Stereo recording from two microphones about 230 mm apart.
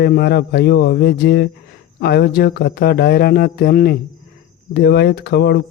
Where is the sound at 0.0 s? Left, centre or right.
Left.